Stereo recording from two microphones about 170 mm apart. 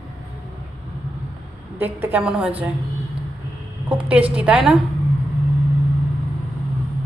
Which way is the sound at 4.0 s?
5° right (ahead or behind).